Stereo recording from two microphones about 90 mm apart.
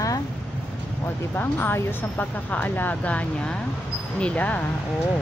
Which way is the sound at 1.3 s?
20° left (ahead or behind).